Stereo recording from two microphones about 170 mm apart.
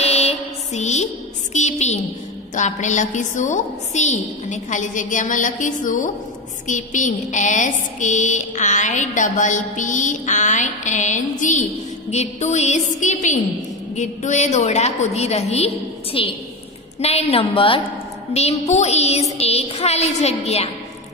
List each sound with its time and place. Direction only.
0.0 s mantra: 40° left (ahead or behind)
1.5 s a woman's voice: 40° left (ahead or behind)
2.5 s a sound: 45° left (ahead or behind)
13.9 s a woman's voice: 45° left (ahead or behind)